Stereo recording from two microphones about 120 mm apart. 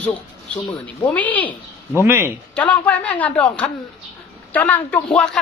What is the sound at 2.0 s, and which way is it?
Speech, 20° right (ahead or behind).